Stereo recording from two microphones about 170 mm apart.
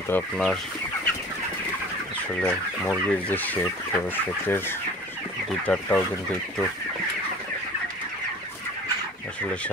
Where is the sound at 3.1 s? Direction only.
10° left (ahead or behind).